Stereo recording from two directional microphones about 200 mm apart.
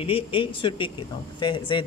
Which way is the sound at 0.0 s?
25° left (ahead or behind).